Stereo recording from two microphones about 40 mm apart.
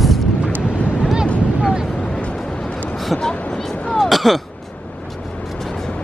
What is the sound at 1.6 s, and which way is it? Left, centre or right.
Vehicle, centre.